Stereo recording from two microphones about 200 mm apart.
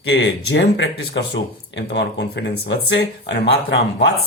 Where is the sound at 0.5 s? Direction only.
60° left (ahead or behind).